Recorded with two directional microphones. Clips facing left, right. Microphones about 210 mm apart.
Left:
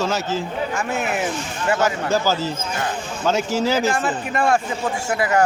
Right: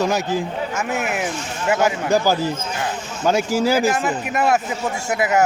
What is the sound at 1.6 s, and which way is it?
Speech, 15° right (ahead or behind).